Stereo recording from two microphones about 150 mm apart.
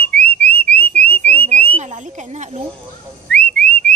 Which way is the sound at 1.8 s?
55° right (ahead or behind).